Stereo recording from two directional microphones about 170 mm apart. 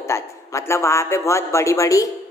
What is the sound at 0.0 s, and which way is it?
A woman's voice, 15° left (ahead or behind).